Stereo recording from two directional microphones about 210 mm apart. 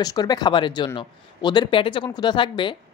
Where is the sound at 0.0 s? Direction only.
20° left (ahead or behind).